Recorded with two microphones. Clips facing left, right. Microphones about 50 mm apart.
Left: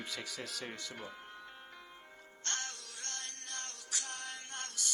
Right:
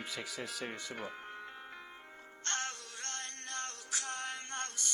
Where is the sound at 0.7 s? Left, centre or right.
Right.